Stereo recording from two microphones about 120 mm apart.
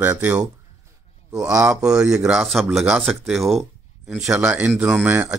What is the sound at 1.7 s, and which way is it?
Speech, 5° right (ahead or behind).